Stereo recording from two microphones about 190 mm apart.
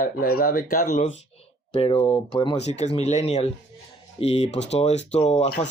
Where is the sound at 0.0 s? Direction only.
50° left (ahead or behind).